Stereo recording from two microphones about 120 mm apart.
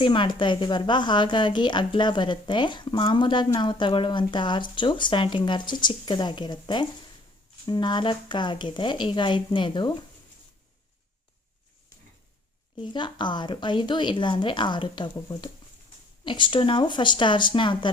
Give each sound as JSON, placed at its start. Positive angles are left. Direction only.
{"t": 0.0, "sound": "a woman's voice", "side_deg": 45}
{"t": 12.8, "sound": "a woman's voice", "side_deg": 40}